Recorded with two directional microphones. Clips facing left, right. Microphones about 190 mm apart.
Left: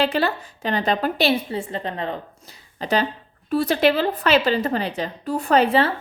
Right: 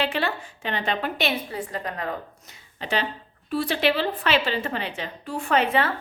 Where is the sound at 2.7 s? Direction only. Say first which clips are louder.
Left 5 dB; 40° left (ahead or behind).